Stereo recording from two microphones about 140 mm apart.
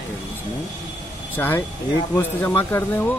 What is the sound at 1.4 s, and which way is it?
Speech, 15° left (ahead or behind).